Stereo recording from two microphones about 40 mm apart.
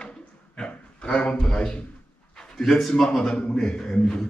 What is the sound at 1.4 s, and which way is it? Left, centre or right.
A man's voice, centre.